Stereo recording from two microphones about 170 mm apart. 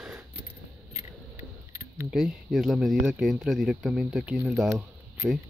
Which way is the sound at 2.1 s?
Centre (ahead or behind).